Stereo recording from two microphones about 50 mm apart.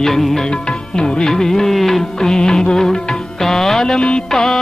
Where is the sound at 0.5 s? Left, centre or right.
Centre.